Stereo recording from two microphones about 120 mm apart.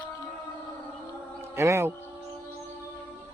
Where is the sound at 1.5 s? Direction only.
20° right (ahead or behind).